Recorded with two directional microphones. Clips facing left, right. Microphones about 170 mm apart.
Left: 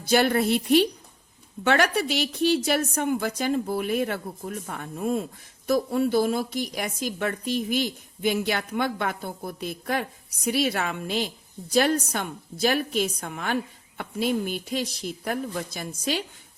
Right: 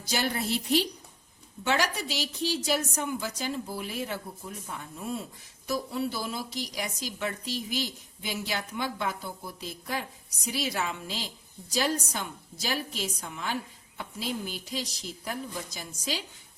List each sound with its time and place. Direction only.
0.0 s speech: 55° left (ahead or behind)